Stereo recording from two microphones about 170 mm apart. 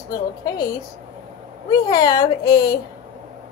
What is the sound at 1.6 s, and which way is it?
A woman's voice, 20° left (ahead or behind).